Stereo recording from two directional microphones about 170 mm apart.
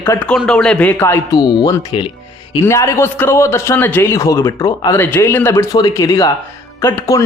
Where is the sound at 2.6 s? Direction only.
15° left (ahead or behind).